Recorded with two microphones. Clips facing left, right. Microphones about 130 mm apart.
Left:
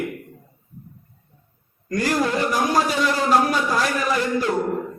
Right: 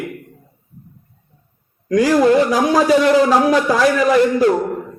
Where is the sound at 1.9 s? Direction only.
90° right.